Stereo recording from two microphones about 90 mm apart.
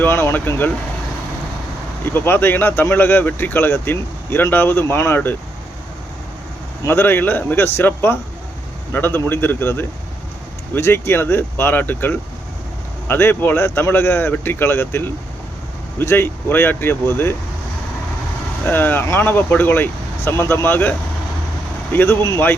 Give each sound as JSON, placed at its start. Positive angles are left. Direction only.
{"t": 0.0, "sound": "speech", "side_deg": 25}
{"t": 2.1, "sound": "speech", "side_deg": 25}
{"t": 6.8, "sound": "speech", "side_deg": 25}
{"t": 18.6, "sound": "speech", "side_deg": 20}
{"t": 21.9, "sound": "speech", "side_deg": 25}